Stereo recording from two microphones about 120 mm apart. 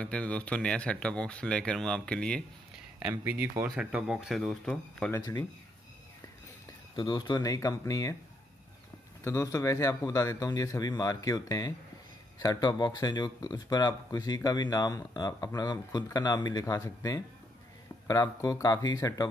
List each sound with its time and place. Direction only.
0.0 s speech: 10° left (ahead or behind)
3.0 s speech: 15° right (ahead or behind); by 5.1 s 5° left (ahead or behind)
7.0 s a man's voice: 35° left (ahead or behind)
9.2 s a man's voice: 25° left (ahead or behind)